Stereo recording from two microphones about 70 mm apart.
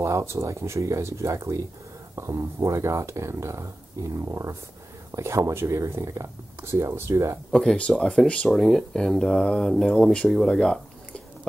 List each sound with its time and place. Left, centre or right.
0.0 s speech: right
7.5 s speech: centre